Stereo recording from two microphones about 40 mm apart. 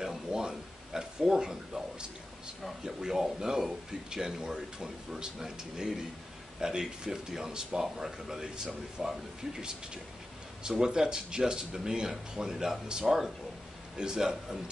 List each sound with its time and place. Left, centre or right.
0.0 s a sound: centre
2.8 s speech: centre
10.6 s speech: centre